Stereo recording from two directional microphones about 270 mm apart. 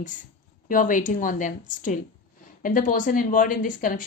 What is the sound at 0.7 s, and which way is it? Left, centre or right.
Speech, left.